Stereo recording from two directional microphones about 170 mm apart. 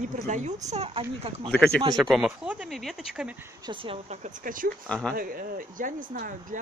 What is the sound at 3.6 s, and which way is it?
Speech, 30° right (ahead or behind).